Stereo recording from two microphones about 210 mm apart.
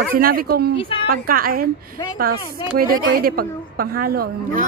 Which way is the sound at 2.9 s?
45° right (ahead or behind).